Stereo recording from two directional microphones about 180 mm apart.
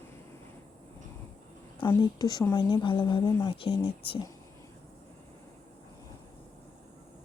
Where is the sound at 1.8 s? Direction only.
25° left (ahead or behind).